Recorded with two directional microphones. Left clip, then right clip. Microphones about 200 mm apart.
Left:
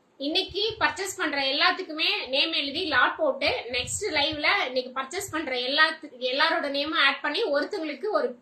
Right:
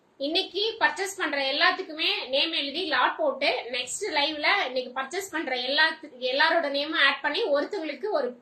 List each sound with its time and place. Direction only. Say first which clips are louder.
0.2 s a woman's voice: even; 15° left (ahead or behind)